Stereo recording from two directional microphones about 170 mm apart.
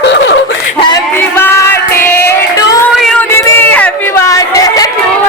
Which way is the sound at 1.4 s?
15° left (ahead or behind).